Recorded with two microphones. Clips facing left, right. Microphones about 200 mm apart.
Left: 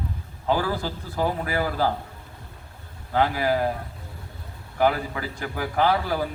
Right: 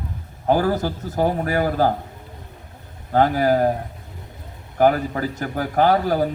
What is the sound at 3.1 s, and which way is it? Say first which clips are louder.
Speech: right 5 dB; 45° right (ahead or behind).